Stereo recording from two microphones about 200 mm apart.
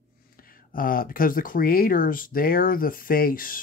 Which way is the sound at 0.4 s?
45° left (ahead or behind).